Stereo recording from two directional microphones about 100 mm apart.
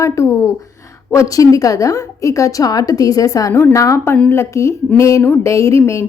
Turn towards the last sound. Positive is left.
turn(degrees=30)  # may be behind; listen again after turning